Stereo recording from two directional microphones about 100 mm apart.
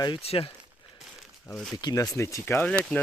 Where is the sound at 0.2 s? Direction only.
75° left (ahead or behind).